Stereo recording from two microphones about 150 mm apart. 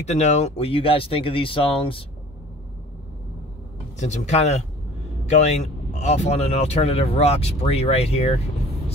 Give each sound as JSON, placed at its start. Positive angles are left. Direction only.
{"t": 0.0, "sound": "speech", "side_deg": 50}
{"t": 4.0, "sound": "speech", "side_deg": 50}